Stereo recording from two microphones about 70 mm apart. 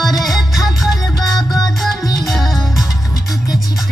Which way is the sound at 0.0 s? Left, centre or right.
Centre.